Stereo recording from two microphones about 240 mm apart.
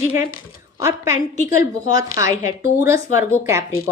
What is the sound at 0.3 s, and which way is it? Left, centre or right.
Speech, left.